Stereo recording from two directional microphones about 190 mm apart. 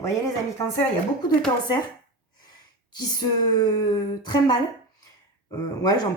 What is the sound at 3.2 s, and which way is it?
Speech, 20° left (ahead or behind).